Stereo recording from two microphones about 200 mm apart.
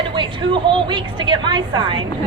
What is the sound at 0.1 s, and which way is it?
A woman's voice, 25° right (ahead or behind).